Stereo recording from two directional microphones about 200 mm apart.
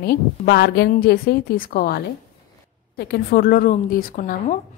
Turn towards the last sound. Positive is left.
turn(degrees=45)  # may be behind; listen again after turning